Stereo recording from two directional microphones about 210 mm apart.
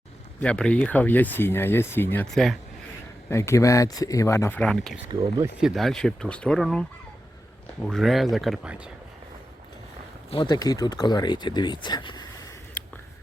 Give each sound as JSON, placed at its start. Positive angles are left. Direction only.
{"t": 0.3, "sound": "speech", "side_deg": 5}
{"t": 3.2, "sound": "speech", "side_deg": 15}
{"t": 7.9, "sound": "speech", "side_deg": 0}
{"t": 10.2, "sound": "speech", "side_deg": 25}